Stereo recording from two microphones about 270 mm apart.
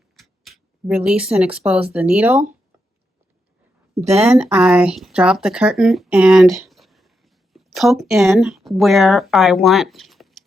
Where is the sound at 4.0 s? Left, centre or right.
Right.